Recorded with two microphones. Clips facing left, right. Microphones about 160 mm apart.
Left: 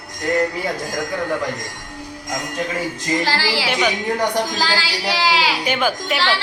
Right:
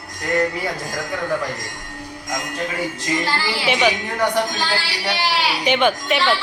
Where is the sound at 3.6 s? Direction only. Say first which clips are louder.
Right 4 dB; centre (ahead or behind).